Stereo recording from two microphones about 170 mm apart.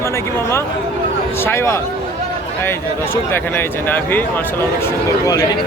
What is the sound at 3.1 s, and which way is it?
Speech, 10° left (ahead or behind).